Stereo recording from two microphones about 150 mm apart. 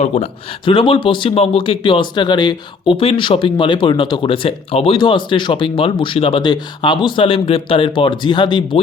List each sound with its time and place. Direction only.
0.0 s speech: 50° left (ahead or behind)
0.6 s speech: 35° left (ahead or behind)